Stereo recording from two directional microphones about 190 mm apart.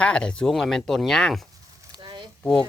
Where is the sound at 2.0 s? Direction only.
25° right (ahead or behind).